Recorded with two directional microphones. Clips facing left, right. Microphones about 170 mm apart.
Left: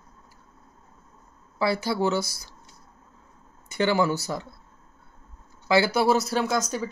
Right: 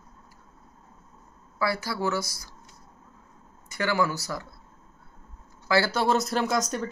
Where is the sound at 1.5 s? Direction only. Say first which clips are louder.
Left 4 dB; 25° left (ahead or behind).